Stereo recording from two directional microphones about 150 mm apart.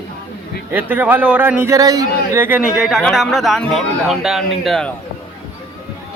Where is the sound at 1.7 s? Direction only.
25° right (ahead or behind).